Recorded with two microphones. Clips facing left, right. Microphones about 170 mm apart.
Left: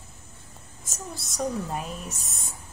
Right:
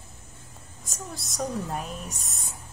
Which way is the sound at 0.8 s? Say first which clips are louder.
Even; centre (ahead or behind).